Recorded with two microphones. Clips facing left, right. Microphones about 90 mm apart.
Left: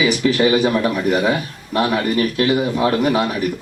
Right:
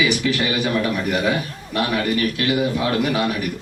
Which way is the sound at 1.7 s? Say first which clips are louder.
Left 3 dB; 30° left (ahead or behind).